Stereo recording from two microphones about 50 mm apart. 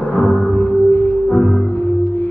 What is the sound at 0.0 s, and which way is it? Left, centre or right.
Music, left.